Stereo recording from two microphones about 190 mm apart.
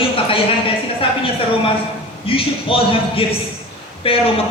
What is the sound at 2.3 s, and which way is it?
Speech, 30° left (ahead or behind).